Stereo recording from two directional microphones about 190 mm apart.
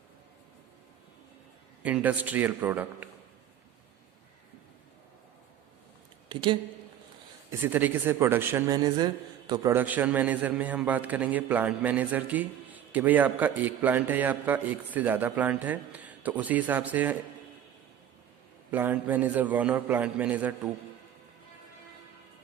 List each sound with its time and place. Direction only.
1.8 s a man's voice: 10° right (ahead or behind)
6.2 s speech: 25° right (ahead or behind)
7.6 s a man's voice: 10° right (ahead or behind)
9.7 s a man's voice: 10° right (ahead or behind)
18.7 s a man's voice: 10° right (ahead or behind)